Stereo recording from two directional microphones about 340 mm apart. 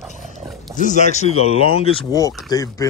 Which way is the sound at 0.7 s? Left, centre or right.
Left.